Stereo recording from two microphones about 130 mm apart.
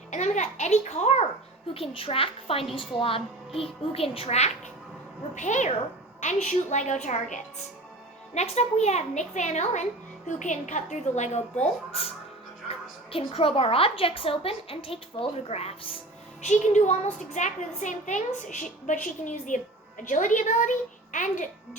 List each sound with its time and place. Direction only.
0.1 s a woman's voice: 65° left (ahead or behind)
1.7 s a woman's voice: 45° left (ahead or behind)
5.3 s a woman's voice: 70° left (ahead or behind)
8.4 s a woman's voice: 60° left (ahead or behind)
11.9 s a woman's voice: 50° left (ahead or behind)
16.4 s a woman's voice: 65° left (ahead or behind)